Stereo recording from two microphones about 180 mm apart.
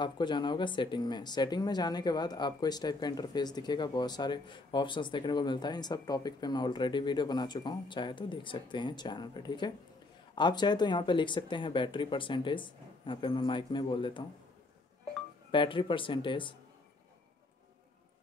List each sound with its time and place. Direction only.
0.0 s speech: 25° left (ahead or behind)
15.5 s speech: 25° left (ahead or behind)